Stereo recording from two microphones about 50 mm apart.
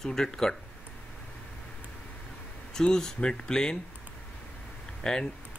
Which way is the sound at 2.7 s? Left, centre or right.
Centre.